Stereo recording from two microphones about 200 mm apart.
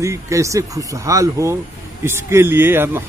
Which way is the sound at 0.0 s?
15° right (ahead or behind).